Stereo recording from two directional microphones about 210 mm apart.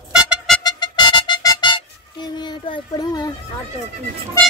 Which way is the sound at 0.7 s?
20° left (ahead or behind).